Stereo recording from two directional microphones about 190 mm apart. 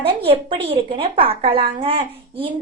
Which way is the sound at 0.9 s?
30° right (ahead or behind).